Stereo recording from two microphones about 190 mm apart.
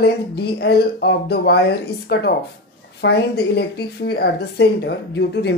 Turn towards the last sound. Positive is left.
turn(degrees=65)  # may be behind; listen again after turning